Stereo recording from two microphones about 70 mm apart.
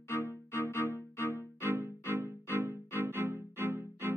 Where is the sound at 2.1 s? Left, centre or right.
Right.